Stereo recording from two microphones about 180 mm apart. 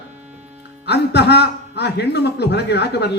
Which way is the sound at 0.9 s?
65° left (ahead or behind).